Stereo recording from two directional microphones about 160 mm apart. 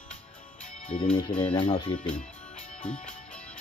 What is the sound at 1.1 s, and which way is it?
Speech, 30° left (ahead or behind).